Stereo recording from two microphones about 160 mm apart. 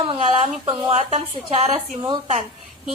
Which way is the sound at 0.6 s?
40° right (ahead or behind).